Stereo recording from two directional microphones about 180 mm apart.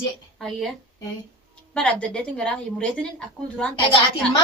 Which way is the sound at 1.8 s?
5° left (ahead or behind).